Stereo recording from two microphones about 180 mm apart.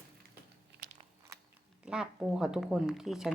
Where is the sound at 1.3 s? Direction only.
20° right (ahead or behind).